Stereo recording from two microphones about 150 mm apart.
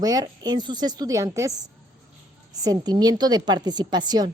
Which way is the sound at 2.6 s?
25° right (ahead or behind).